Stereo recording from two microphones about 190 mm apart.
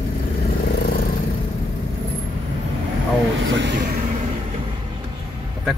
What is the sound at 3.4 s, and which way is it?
Speech, 70° right (ahead or behind).